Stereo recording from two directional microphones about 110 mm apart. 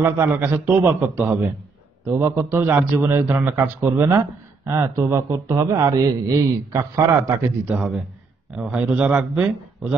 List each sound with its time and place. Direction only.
0.0 s a man's voice: 20° right (ahead or behind)
2.0 s a man's voice: 25° right (ahead or behind)
7.7 s a man's voice: 10° right (ahead or behind)